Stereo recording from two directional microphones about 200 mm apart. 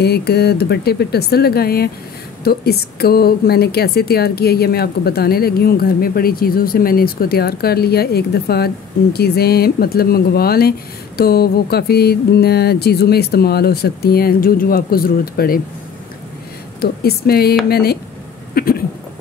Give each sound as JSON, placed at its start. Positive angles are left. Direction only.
{"t": 0.0, "sound": "a woman's voice", "side_deg": 55}
{"t": 16.8, "sound": "a woman's voice", "side_deg": 50}
{"t": 18.5, "sound": "a sound", "side_deg": 45}